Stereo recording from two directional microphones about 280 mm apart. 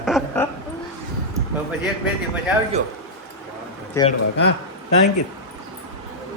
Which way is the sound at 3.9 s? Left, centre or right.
Centre.